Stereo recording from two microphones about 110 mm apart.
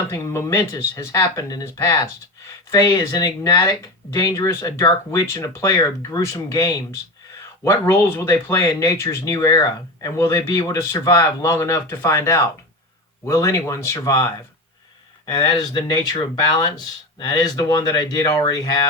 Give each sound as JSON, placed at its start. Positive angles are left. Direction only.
{"t": 0.1, "sound": "speech", "side_deg": 25}
{"t": 15.3, "sound": "speech", "side_deg": 40}